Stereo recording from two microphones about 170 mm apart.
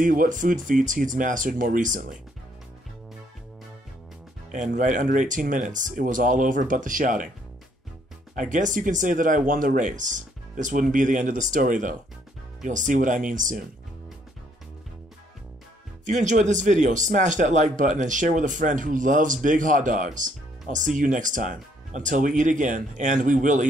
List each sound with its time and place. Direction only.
0.0 s speech: 50° right (ahead or behind)
4.5 s speech: 50° right (ahead or behind)
8.4 s speech: 50° right (ahead or behind)
16.1 s speech: 45° right (ahead or behind)